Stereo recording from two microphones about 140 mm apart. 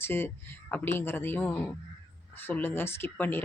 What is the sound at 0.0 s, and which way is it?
Speech, 15° left (ahead or behind).